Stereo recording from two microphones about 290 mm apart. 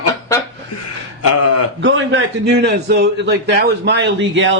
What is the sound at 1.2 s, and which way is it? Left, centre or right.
Speech, left.